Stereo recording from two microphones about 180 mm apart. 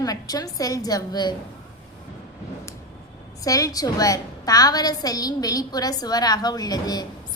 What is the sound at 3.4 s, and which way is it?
A woman's voice, 20° left (ahead or behind).